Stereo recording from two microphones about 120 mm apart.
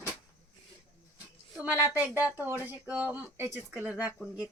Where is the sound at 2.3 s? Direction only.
15° right (ahead or behind).